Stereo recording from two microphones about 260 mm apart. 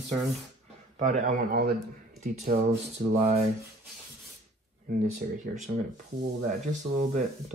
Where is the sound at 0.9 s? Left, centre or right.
Right.